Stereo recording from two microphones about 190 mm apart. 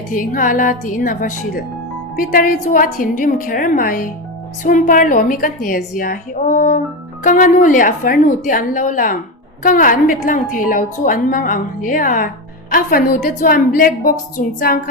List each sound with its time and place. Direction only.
0.1 s a woman's voice: 45° left (ahead or behind)